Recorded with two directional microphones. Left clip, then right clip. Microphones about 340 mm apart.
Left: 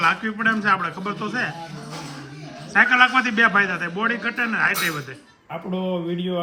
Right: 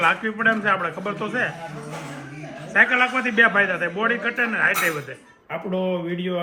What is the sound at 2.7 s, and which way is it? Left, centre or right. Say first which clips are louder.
A man's voice: left 2 dB; centre.